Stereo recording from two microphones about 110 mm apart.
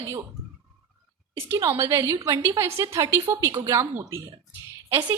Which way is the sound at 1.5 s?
25° right (ahead or behind).